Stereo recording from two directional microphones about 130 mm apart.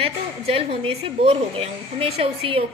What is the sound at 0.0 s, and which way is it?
A woman's voice, 50° right (ahead or behind).